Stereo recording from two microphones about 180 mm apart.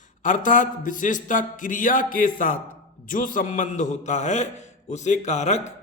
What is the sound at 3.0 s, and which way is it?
A man's voice, 50° left (ahead or behind).